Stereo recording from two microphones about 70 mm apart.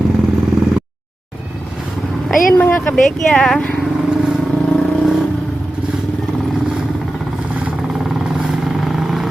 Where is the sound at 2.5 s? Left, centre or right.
Left.